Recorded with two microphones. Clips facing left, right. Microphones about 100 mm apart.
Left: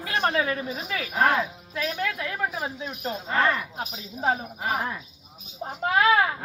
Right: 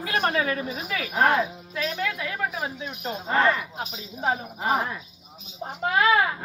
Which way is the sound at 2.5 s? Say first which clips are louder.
Even; centre (ahead or behind).